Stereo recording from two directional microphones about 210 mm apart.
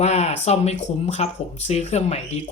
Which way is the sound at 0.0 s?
30° left (ahead or behind).